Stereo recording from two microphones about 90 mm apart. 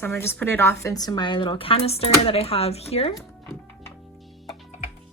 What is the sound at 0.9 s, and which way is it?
Speech, 50° left (ahead or behind).